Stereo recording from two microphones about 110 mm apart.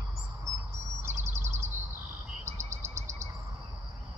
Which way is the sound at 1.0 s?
25° right (ahead or behind).